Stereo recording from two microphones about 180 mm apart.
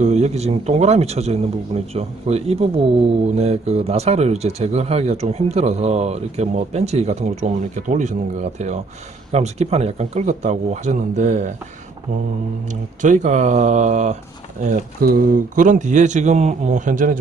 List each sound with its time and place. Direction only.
0.0 s speech: 40° right (ahead or behind)
13.0 s speech: 45° right (ahead or behind)